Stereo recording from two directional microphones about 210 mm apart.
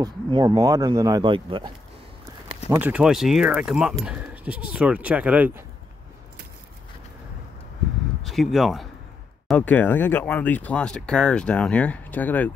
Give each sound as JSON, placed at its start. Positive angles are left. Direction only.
{"t": 0.0, "sound": "speech", "side_deg": -20}
{"t": 2.7, "sound": "speech", "side_deg": -5}
{"t": 8.2, "sound": "speech", "side_deg": 0}